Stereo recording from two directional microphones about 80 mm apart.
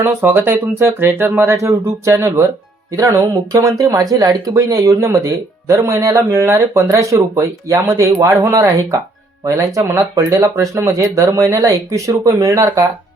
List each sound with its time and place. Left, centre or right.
0.0 s speech: right